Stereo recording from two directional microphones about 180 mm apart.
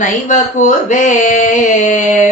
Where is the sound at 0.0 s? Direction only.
40° left (ahead or behind).